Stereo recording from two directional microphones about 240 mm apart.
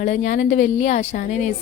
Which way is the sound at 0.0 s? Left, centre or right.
Left.